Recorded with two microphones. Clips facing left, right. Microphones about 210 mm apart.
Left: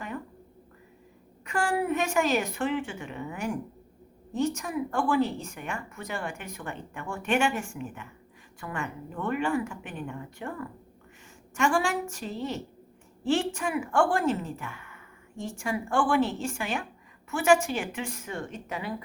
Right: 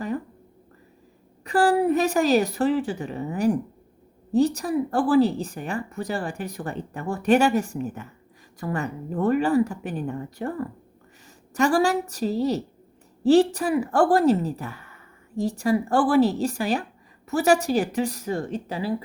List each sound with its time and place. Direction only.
1.5 s a woman's voice: 35° right (ahead or behind)